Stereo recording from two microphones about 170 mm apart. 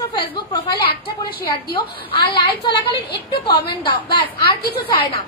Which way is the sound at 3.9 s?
65° left (ahead or behind).